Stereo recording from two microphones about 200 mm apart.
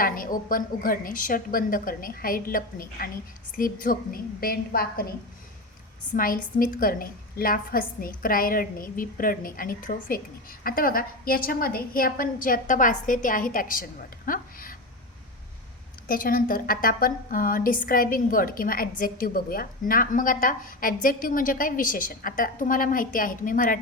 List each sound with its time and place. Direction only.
0.0 s a woman's voice: 45° left (ahead or behind)
6.1 s a woman's voice: 45° left (ahead or behind)
14.3 s a sound: 45° left (ahead or behind)
16.0 s a woman's voice: 45° left (ahead or behind)